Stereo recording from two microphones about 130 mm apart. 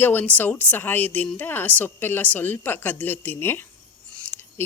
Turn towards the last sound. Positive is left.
turn(degrees=15)  # may be behind; listen again after turning